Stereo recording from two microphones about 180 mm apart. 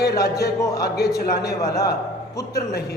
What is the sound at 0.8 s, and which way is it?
Speech, 65° left (ahead or behind).